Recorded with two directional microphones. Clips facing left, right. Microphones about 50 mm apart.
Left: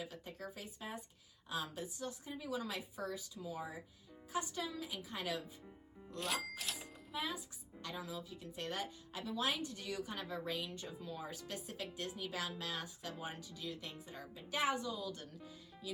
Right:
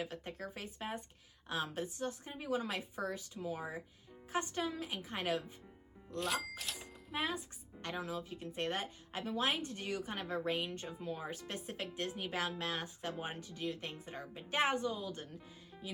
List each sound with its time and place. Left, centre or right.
0.0 s a woman's voice: right
6.1 s music: centre
7.2 s speech: right